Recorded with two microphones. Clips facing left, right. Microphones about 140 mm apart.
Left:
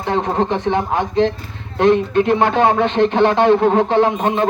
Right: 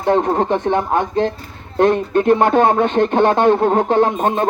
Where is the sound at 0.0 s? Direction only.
50° right (ahead or behind).